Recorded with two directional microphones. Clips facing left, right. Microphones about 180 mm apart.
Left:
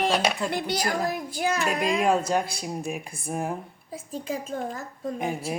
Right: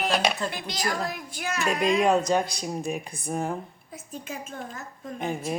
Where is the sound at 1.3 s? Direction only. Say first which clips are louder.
Left 6 dB; 35° left (ahead or behind).